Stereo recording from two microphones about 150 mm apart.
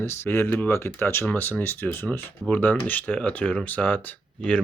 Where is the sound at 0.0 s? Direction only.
15° left (ahead or behind).